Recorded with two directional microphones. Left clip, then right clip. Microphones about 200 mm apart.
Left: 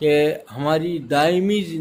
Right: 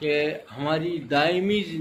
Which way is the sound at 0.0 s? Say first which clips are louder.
Left 7 dB; 60° left (ahead or behind).